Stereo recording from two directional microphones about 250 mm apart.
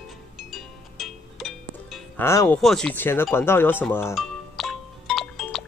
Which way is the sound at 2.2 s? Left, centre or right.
Centre.